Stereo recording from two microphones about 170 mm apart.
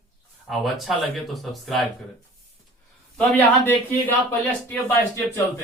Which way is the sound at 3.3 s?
10° left (ahead or behind).